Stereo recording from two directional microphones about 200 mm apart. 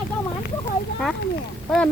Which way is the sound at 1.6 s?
5° left (ahead or behind).